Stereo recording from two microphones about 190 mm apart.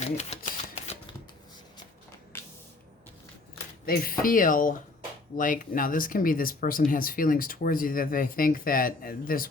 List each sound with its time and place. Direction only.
0.0 s typewriter: 35° left (ahead or behind)
2.3 s a sound: 10° left (ahead or behind)
3.8 s speech: 50° left (ahead or behind)